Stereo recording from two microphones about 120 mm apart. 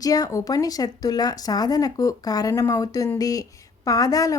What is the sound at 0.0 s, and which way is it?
Speech, 30° left (ahead or behind).